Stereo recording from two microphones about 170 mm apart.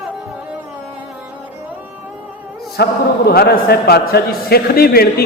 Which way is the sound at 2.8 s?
70° left (ahead or behind).